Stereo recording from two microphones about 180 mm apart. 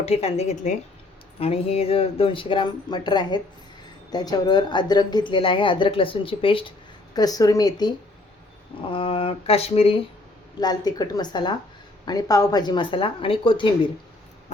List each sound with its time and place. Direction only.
0.0 s a woman's voice: 35° left (ahead or behind)